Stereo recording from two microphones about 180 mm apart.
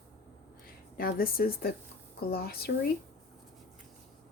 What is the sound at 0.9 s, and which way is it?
Speech, 55° left (ahead or behind).